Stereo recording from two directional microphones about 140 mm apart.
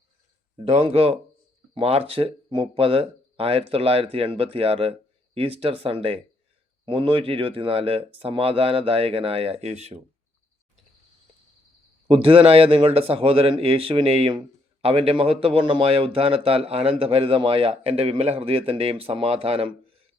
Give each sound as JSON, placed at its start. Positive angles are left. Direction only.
{"t": 0.7, "sound": "speech", "side_deg": -45}
{"t": 12.0, "sound": "speech", "side_deg": -40}